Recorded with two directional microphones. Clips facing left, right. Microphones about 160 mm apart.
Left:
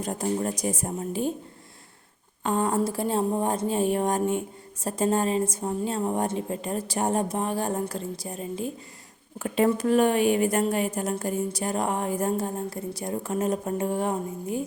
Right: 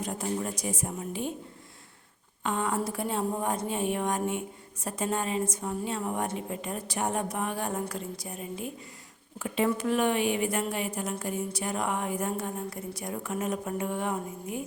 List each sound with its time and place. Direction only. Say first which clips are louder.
0.0 s a woman's voice: left 4 dB; 40° left (ahead or behind)
2.4 s a woman's voice: left 5 dB; 35° left (ahead or behind)